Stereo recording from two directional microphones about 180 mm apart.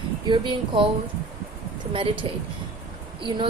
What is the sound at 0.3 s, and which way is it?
Speech, 30° right (ahead or behind).